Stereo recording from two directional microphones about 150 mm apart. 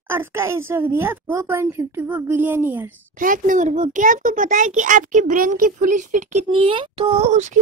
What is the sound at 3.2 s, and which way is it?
A child's voice, 60° right (ahead or behind).